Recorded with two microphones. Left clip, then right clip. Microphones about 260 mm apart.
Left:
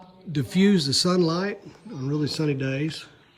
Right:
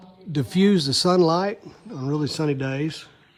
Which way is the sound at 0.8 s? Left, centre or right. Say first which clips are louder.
Right 3 dB; centre.